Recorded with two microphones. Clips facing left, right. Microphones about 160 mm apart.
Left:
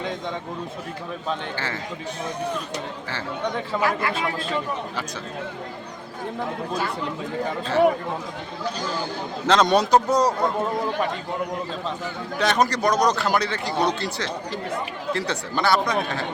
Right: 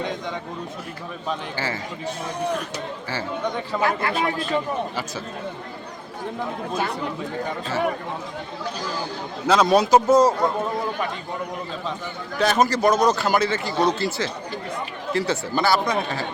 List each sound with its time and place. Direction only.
1.3 s a man's voice: 5° right (ahead or behind)
3.8 s speech: 25° right (ahead or behind)
4.1 s speech: 30° left (ahead or behind)
9.5 s a man's voice: 5° right (ahead or behind)
12.4 s a man's voice: centre (ahead or behind)